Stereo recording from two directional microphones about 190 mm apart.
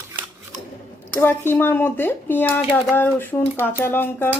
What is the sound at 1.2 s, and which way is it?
Speech, 10° left (ahead or behind).